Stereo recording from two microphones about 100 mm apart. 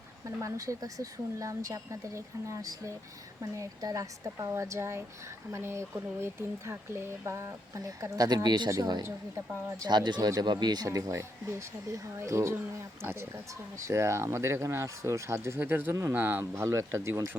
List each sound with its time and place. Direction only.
0.3 s a woman's voice: 30° right (ahead or behind); by 10.8 s 45° right (ahead or behind)
10.8 s a woman's voice: 35° right (ahead or behind)